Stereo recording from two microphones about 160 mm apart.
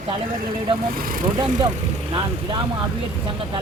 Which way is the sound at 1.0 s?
65° right (ahead or behind).